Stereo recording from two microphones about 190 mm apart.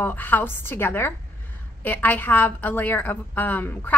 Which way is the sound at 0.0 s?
10° left (ahead or behind).